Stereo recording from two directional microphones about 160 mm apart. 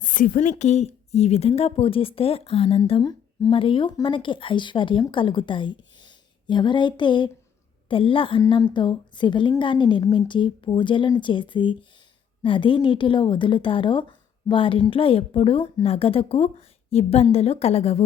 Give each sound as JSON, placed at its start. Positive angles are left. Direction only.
{"t": 0.0, "sound": "a woman's voice", "side_deg": 55}